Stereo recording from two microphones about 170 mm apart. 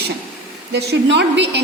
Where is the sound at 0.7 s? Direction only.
85° right.